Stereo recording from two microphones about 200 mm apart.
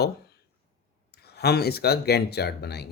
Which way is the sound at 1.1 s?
55° left (ahead or behind).